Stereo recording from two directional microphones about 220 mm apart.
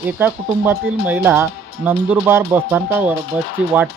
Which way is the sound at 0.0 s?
10° right (ahead or behind).